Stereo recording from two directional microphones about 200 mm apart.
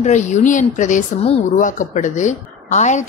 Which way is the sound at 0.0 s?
35° left (ahead or behind).